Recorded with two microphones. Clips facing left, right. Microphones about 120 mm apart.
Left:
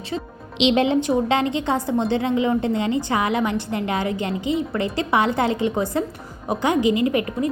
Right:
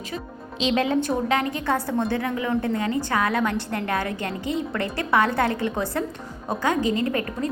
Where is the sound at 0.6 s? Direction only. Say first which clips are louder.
Left 4 dB; 25° left (ahead or behind).